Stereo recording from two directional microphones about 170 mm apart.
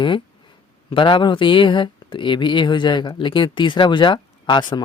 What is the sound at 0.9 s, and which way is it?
Speech, 30° left (ahead or behind).